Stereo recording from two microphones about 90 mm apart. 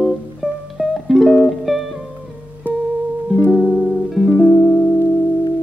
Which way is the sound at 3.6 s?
5° left (ahead or behind).